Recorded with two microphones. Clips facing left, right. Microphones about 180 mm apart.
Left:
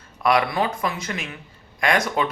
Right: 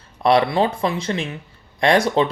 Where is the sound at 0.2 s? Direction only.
30° right (ahead or behind).